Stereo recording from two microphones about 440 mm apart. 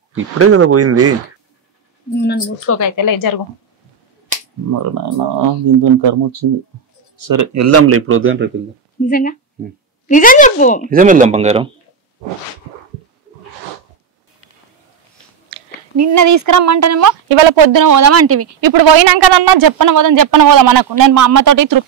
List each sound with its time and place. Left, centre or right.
0.1 s speech: right
2.1 s speech: left
3.0 s a woman's voice: left
4.9 s speech: right
7.2 s speech: right
9.0 s a woman's voice: centre
10.8 s speech: centre
16.0 s speech: right
17.3 s speech: right
17.7 s speech: right
18.6 s speech: right